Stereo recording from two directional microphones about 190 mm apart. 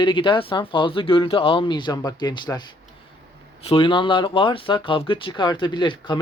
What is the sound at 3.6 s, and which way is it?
Speech, 25° left (ahead or behind).